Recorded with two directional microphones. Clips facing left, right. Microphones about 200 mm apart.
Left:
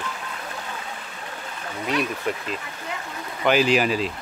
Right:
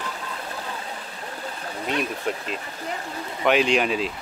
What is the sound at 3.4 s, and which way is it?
Speech, centre (ahead or behind).